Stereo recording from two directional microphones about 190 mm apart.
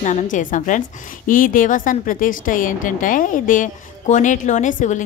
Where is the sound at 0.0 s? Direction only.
40° left (ahead or behind).